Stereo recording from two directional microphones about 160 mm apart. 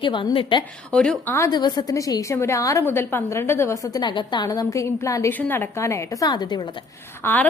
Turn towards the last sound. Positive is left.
turn(degrees=15)  # may be behind; listen again after turning